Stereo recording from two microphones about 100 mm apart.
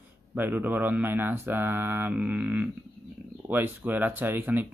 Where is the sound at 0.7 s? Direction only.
20° right (ahead or behind).